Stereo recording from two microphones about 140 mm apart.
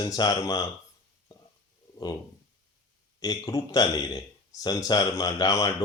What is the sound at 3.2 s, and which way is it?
Speech, 25° left (ahead or behind).